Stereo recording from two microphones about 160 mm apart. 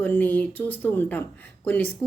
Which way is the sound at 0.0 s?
10° left (ahead or behind).